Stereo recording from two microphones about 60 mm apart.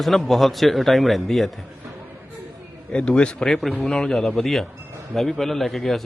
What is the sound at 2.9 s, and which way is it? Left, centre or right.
Speech, centre.